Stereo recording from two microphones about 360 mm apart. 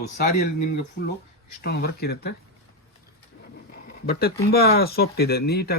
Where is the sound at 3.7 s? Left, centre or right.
Left.